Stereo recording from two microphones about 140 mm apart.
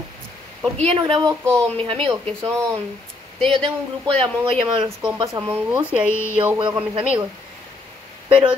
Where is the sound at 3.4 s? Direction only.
40° right (ahead or behind).